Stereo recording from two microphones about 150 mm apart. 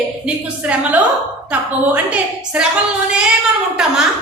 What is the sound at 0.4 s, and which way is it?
A woman's voice, 10° right (ahead or behind).